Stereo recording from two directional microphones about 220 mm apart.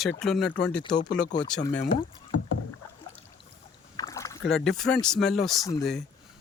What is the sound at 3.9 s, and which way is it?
Rowboat, 15° left (ahead or behind).